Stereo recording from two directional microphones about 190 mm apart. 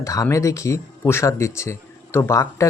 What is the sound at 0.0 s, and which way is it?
Speech, 15° left (ahead or behind).